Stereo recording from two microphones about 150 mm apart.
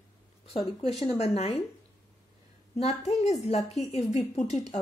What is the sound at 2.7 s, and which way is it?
A woman's voice, 45° left (ahead or behind).